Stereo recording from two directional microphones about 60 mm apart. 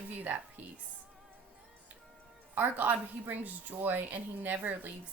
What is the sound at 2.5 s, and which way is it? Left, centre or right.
Speech, right.